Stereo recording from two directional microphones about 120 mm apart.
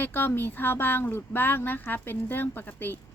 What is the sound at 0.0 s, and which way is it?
A woman's voice, 15° left (ahead or behind).